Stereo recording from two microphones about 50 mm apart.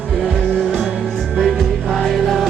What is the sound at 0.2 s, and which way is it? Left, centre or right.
Music, centre.